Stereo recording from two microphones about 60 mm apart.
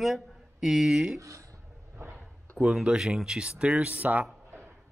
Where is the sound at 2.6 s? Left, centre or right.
Centre.